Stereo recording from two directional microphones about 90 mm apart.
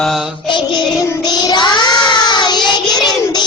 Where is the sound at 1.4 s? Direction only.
55° left (ahead or behind).